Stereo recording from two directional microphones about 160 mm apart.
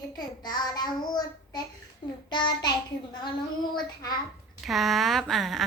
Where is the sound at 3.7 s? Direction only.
25° left (ahead or behind).